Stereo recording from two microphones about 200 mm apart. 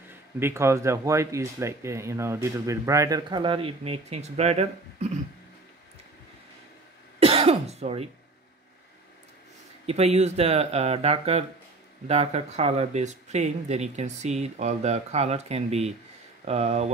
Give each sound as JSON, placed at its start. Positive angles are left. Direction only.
{"t": 0.4, "sound": "speech", "side_deg": -15}
{"t": 7.2, "sound": "throat clearing", "side_deg": -30}
{"t": 9.8, "sound": "speech", "side_deg": -30}